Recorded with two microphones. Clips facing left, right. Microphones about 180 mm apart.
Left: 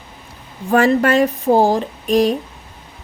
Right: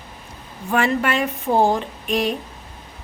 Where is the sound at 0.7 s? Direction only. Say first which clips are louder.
Left 6 dB; 40° left (ahead or behind).